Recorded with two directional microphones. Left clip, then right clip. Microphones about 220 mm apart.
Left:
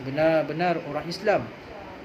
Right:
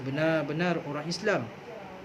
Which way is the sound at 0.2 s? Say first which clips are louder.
Left 6 dB; 15° left (ahead or behind).